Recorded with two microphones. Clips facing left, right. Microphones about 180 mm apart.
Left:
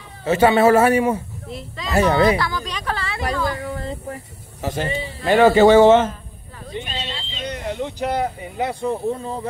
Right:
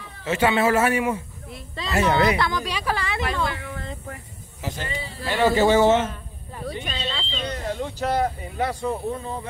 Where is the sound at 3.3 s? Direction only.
35° left (ahead or behind).